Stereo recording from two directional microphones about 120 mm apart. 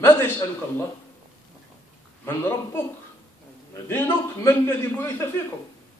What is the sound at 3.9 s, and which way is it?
A man's voice, 20° left (ahead or behind).